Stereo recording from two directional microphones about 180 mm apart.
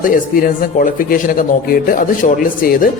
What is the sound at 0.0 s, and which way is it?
Speech, 50° left (ahead or behind).